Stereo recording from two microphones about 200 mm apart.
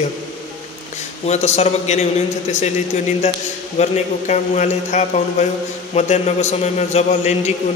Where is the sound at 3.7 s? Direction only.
35° left (ahead or behind).